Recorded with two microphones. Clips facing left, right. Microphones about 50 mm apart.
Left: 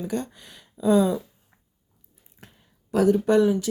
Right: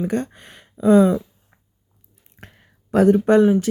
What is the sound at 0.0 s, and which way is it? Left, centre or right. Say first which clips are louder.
Speech: right 6 dB; right.